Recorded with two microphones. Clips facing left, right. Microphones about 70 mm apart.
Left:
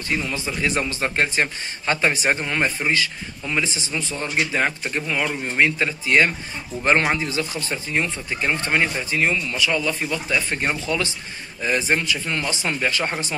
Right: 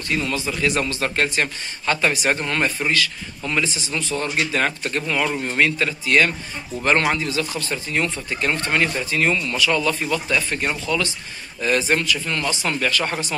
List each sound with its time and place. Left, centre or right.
0.2 s a man's voice: centre
5.8 s a man's voice: centre
10.6 s a man's voice: left